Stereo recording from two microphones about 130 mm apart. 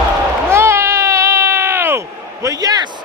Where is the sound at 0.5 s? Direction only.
20° right (ahead or behind).